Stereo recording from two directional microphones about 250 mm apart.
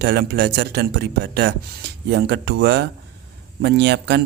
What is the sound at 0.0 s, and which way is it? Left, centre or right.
Speech, right.